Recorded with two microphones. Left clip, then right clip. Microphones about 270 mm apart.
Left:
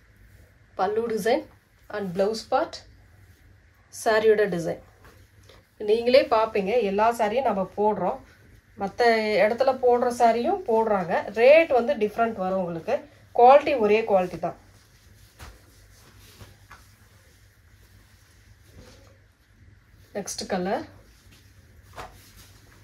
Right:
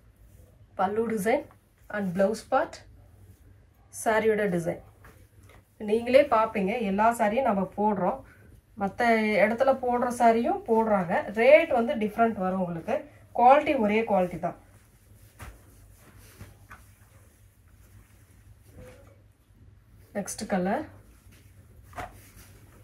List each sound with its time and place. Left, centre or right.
0.7 s a woman's voice: left
4.0 s a woman's voice: left
5.9 s a woman's voice: left
20.1 s a woman's voice: left